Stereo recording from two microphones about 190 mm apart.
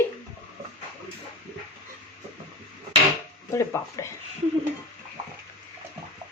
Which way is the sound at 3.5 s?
15° left (ahead or behind).